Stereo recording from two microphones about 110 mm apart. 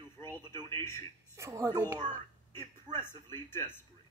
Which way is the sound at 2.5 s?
20° left (ahead or behind).